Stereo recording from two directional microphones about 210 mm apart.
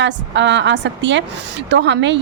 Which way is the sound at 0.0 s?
60° right (ahead or behind).